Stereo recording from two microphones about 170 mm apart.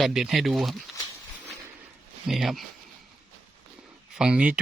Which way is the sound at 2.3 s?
Centre (ahead or behind).